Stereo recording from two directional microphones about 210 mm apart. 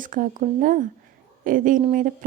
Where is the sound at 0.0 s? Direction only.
40° right (ahead or behind).